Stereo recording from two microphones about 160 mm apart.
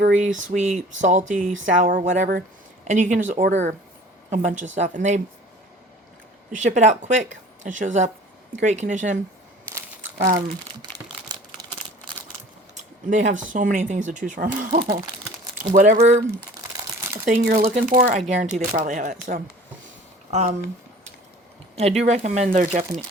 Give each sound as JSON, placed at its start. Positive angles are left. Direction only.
{"t": 0.3, "sound": "speech", "side_deg": -50}
{"t": 6.5, "sound": "speech", "side_deg": -50}
{"t": 10.2, "sound": "speech", "side_deg": -60}
{"t": 11.3, "sound": "crumpling", "side_deg": -25}
{"t": 12.7, "sound": "a sound", "side_deg": -50}
{"t": 13.3, "sound": "speech", "side_deg": -55}
{"t": 17.2, "sound": "speech", "side_deg": -60}
{"t": 18.2, "sound": "speech", "side_deg": -45}
{"t": 20.3, "sound": "speech", "side_deg": -45}
{"t": 21.8, "sound": "speech", "side_deg": -40}
{"t": 22.7, "sound": "speech", "side_deg": -45}